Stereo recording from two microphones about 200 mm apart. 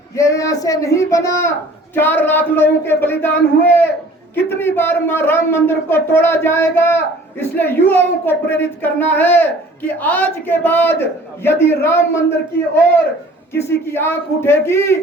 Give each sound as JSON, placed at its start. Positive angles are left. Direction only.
{"t": 0.2, "sound": "a man's voice", "side_deg": 15}
{"t": 13.5, "sound": "a man's voice", "side_deg": 10}